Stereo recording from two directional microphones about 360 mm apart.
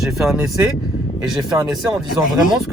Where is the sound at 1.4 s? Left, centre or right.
Centre.